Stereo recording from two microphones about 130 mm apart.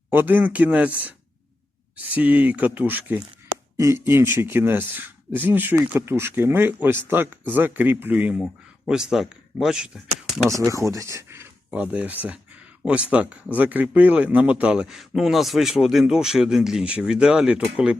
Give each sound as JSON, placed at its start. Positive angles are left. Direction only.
{"t": 0.1, "sound": "speech", "side_deg": -15}
{"t": 10.7, "sound": "speech", "side_deg": -25}
{"t": 11.7, "sound": "speech", "side_deg": -10}